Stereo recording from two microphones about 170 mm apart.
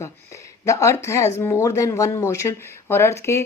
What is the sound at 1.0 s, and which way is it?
Speech, 20° left (ahead or behind).